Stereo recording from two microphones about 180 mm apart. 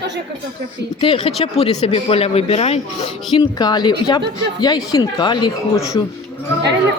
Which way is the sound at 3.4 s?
20° left (ahead or behind).